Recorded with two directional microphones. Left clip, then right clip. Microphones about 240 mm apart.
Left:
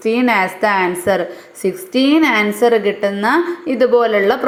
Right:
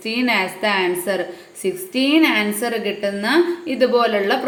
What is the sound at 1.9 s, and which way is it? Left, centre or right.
Speech, left.